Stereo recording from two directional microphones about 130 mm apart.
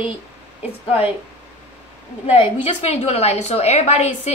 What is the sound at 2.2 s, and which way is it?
A woman's voice, 50° left (ahead or behind).